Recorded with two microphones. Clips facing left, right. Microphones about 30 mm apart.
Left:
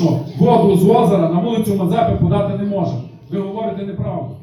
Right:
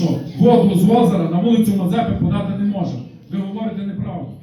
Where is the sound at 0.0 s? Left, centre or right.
Left.